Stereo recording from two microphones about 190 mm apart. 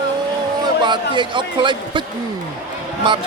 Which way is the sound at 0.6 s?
25° right (ahead or behind).